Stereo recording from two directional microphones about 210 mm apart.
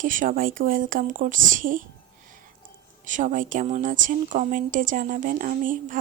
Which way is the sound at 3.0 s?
40° right (ahead or behind).